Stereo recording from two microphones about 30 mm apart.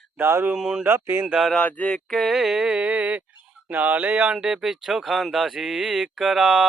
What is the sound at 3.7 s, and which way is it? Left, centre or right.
Speech, right.